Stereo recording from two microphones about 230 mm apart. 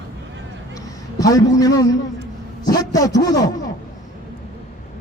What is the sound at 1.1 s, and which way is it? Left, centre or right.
A man's voice, centre.